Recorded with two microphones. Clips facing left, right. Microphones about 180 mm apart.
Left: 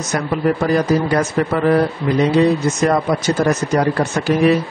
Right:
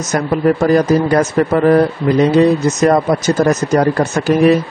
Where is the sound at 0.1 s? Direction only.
45° right (ahead or behind).